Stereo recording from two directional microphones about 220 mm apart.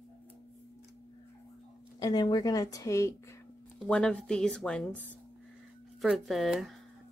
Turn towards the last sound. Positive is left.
turn(degrees=0)  # may be behind; listen again after turning